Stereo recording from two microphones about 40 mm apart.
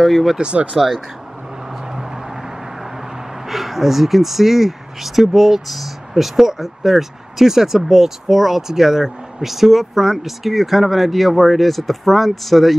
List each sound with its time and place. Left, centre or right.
0.0 s speech: centre
1.9 s vehicle: centre
3.4 s speech: centre